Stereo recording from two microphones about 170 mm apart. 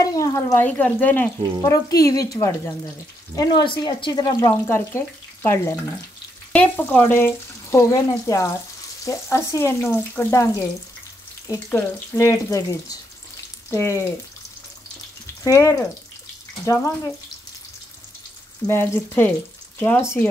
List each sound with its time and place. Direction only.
0.0 s frying: 20° left (ahead or behind)
1.6 s speech: 20° left (ahead or behind)
6.5 s frying: 10° left (ahead or behind)
11.7 s frying: 15° left (ahead or behind)
15.4 s frying: 20° left (ahead or behind)
18.7 s frying: 15° left (ahead or behind)